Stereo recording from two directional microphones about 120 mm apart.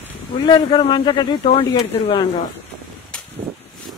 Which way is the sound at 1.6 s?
55° left (ahead or behind).